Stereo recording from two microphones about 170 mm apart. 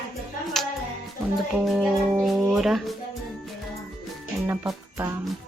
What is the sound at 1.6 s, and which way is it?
Speech, centre (ahead or behind).